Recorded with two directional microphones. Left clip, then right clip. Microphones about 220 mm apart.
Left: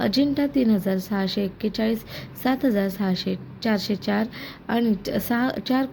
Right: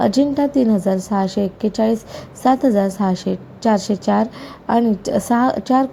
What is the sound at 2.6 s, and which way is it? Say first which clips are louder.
Speech: right 7 dB; 5° left (ahead or behind).